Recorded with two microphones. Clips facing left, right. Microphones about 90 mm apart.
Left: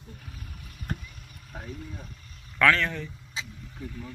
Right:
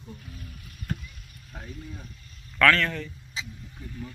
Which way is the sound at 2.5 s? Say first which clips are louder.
Right 1 dB; 15° left (ahead or behind).